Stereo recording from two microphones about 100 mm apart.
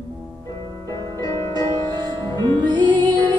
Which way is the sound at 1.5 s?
50° right (ahead or behind).